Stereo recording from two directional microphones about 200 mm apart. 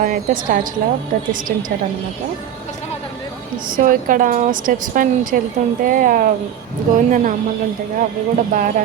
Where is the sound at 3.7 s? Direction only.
45° right (ahead or behind).